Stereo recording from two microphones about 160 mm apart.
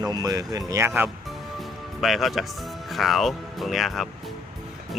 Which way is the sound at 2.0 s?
Centre (ahead or behind).